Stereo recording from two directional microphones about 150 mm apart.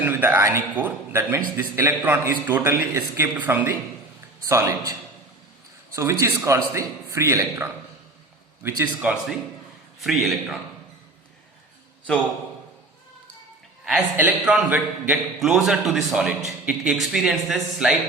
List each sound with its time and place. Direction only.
0.0 s a man's voice: 15° right (ahead or behind)
13.8 s a man's voice: 5° right (ahead or behind)